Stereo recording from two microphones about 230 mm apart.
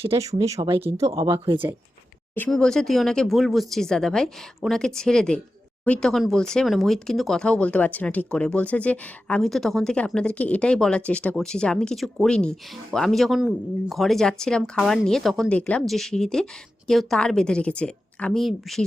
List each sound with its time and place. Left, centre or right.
0.2 s speech: centre
2.3 s speech: centre